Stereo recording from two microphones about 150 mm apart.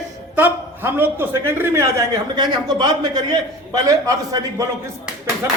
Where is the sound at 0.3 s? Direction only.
15° right (ahead or behind).